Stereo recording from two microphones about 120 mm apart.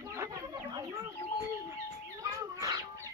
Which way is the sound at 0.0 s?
25° right (ahead or behind).